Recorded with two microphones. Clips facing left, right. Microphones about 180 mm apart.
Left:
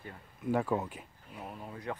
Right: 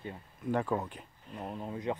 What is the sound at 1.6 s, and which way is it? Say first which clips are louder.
Speech: right 5 dB; 20° right (ahead or behind).